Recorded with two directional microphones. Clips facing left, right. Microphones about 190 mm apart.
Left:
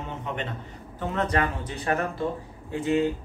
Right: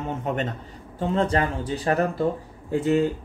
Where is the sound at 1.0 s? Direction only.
30° right (ahead or behind).